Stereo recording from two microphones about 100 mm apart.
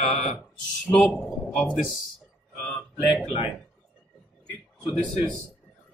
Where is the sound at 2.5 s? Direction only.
10° left (ahead or behind).